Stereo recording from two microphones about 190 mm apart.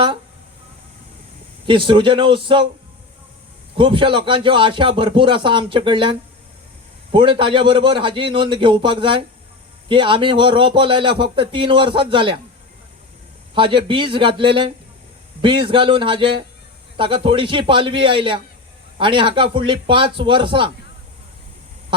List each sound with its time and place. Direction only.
1.6 s speech: 25° right (ahead or behind)
3.8 s speech: 25° right (ahead or behind)
13.5 s speech: 25° right (ahead or behind)